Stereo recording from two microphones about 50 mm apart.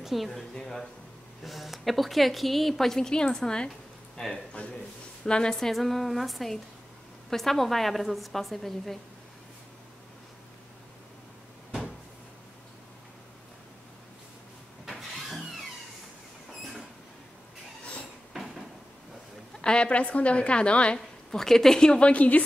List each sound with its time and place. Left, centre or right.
0.0 s a woman's voice: centre
4.6 s a woman's voice: left
5.2 s a woman's voice: centre
14.9 s vehicle: centre
18.3 s door: centre
19.6 s a woman's voice: centre
21.3 s a woman's voice: centre; by 22.4 s left